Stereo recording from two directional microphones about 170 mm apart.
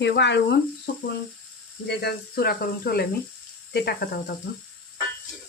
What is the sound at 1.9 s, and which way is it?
Speech, 70° left (ahead or behind).